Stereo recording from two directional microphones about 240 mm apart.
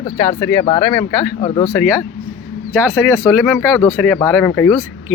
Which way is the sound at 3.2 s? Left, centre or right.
Centre.